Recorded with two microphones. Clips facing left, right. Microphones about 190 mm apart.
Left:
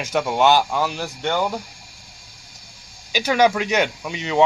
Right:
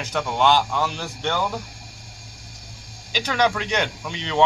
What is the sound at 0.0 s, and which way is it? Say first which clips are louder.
Speech: left 3 dB; 10° left (ahead or behind).